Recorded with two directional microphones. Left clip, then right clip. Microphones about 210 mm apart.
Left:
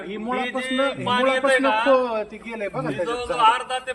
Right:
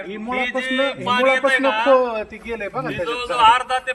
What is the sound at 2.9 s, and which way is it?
Speech, 20° right (ahead or behind).